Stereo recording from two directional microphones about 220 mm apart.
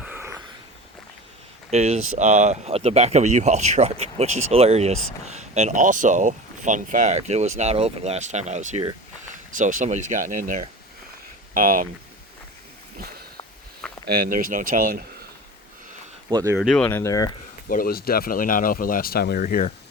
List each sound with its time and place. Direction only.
0.0 s a sound: 10° right (ahead or behind)
1.7 s speech: 30° right (ahead or behind)
14.1 s speech: 40° right (ahead or behind)
16.3 s speech: 15° right (ahead or behind)
16.6 s speech: centre (ahead or behind)
17.7 s speech: 40° left (ahead or behind)